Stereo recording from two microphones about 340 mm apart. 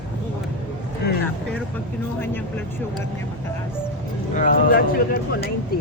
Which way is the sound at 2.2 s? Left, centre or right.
Centre.